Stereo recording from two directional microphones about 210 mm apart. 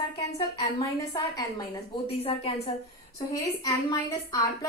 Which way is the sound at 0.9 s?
15° left (ahead or behind).